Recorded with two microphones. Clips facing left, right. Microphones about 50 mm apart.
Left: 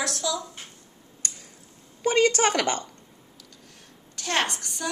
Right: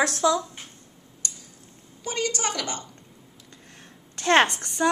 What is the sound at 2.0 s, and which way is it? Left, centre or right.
Speech, left.